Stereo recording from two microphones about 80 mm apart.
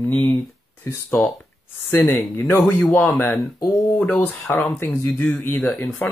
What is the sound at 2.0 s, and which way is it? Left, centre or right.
Speech, left.